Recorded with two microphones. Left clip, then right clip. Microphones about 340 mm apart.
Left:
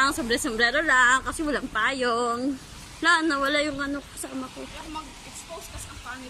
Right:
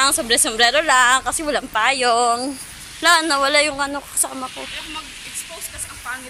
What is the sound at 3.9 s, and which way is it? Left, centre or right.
Speech, right.